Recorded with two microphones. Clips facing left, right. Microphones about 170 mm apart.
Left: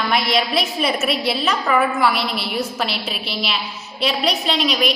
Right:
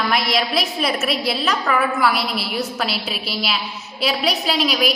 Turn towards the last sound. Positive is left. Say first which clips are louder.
# even
turn(degrees=0)  # may be behind; listen again after turning